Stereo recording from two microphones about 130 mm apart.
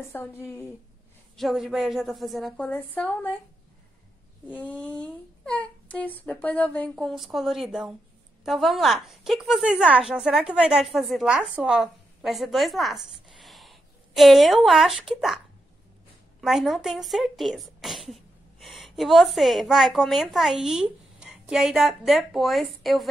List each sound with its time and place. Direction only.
0.0 s a woman's voice: 15° left (ahead or behind)
1.3 s a woman's voice: centre (ahead or behind)
4.6 s a woman's voice: 10° left (ahead or behind)
13.4 s a sound: centre (ahead or behind)
16.3 s speech: centre (ahead or behind)